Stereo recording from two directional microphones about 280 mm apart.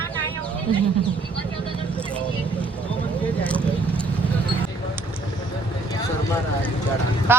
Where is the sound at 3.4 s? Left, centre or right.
Centre.